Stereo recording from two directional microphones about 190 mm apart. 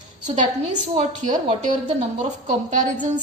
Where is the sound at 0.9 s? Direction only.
35° right (ahead or behind).